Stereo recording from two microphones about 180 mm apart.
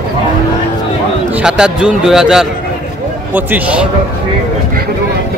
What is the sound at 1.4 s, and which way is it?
Speech, 5° right (ahead or behind).